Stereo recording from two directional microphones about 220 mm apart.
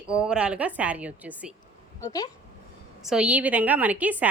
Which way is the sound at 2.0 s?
15° left (ahead or behind).